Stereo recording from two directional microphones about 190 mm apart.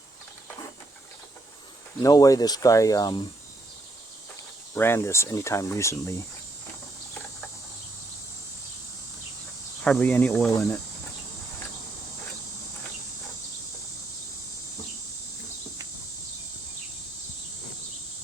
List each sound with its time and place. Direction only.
2.0 s speech: 20° left (ahead or behind)
4.7 s speech: 15° left (ahead or behind)
9.8 s speech: 5° left (ahead or behind)